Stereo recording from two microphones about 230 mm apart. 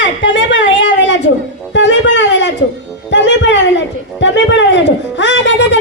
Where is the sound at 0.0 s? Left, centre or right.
Left.